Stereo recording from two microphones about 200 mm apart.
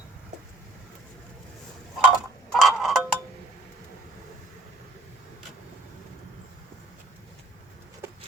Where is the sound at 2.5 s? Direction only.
Centre (ahead or behind).